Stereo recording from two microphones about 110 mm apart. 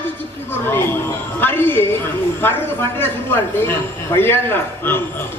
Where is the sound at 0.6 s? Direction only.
20° left (ahead or behind).